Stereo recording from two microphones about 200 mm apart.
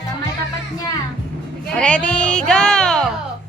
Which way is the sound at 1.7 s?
5° left (ahead or behind).